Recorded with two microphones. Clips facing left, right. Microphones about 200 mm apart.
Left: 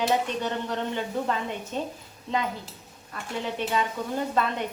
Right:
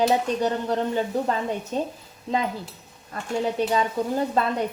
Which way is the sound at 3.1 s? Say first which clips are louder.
Right 6 dB; 40° right (ahead or behind).